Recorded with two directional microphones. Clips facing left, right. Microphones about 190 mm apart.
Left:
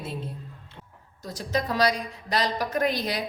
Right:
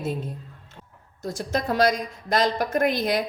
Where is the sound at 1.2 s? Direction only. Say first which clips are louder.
Right 2 dB; 45° right (ahead or behind).